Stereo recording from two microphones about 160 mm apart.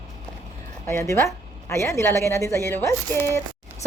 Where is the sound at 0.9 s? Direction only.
15° left (ahead or behind).